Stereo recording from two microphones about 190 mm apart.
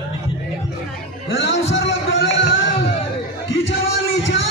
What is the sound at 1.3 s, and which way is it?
Music, 75° left (ahead or behind).